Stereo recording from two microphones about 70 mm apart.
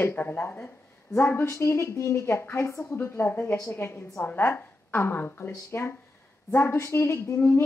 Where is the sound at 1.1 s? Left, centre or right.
Left.